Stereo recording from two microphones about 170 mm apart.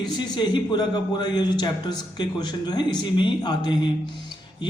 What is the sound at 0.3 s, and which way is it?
A man's voice, 25° left (ahead or behind).